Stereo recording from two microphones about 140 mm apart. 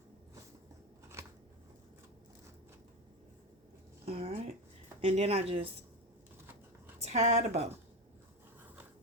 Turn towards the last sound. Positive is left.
turn(degrees=-50)  # may be behind; listen again after turning